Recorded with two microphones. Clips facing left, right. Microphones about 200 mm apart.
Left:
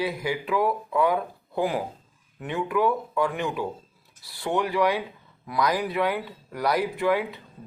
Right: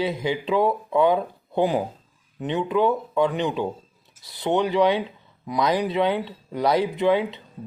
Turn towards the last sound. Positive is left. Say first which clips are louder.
# right 4 dB
turn(degrees=-20)  # may be behind; listen again after turning